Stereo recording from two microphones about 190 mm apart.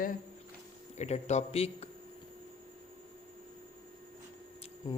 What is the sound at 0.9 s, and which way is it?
Speech, 35° left (ahead or behind).